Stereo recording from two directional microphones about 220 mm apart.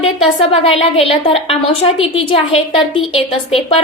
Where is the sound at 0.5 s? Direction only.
25° left (ahead or behind).